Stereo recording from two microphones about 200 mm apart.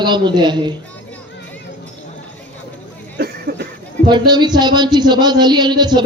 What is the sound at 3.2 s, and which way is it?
Cough, 50° right (ahead or behind).